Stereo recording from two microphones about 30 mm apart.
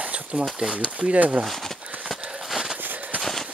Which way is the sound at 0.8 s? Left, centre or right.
Right.